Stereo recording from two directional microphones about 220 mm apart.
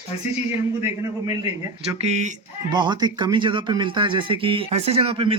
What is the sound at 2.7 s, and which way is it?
Speech, 20° right (ahead or behind).